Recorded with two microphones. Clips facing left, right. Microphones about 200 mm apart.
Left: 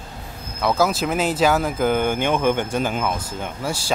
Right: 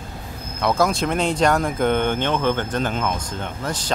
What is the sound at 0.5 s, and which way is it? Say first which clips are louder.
Speech: even; centre (ahead or behind).